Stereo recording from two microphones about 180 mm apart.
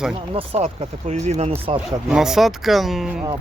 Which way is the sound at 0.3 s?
35° right (ahead or behind).